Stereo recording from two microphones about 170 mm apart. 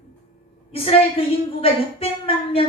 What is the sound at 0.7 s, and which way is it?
A woman's voice, 35° left (ahead or behind).